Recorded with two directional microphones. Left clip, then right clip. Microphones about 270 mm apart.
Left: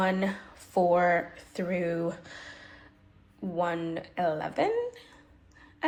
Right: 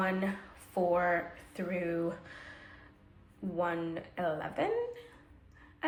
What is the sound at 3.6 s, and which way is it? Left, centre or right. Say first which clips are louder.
Speech: left 4 dB; centre.